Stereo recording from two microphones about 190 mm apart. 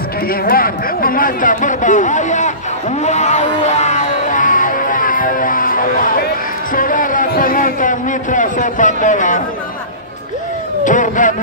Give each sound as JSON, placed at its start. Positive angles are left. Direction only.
{"t": 0.3, "sound": "a man's voice", "side_deg": 50}
{"t": 10.8, "sound": "a man's voice", "side_deg": 40}